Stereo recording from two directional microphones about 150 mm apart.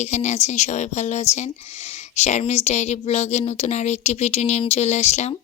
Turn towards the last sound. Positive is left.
turn(degrees=45)  # may be behind; listen again after turning